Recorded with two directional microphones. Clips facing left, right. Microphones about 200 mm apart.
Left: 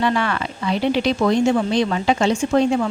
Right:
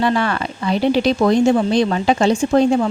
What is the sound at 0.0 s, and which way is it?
Speech, 35° right (ahead or behind).